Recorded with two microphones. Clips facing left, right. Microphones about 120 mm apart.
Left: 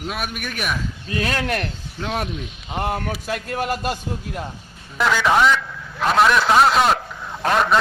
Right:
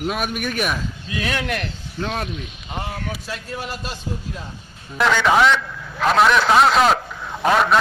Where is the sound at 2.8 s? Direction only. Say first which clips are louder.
Left 5 dB; 55° left (ahead or behind).